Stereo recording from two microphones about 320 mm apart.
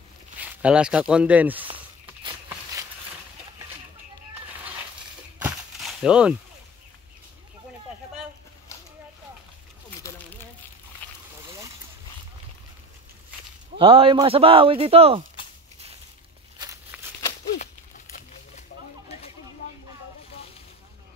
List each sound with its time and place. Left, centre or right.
0.4 s speech: centre
5.4 s a sound: centre
11.4 s boat: centre
13.7 s speech: centre
16.5 s walk: centre
17.6 s a sound: left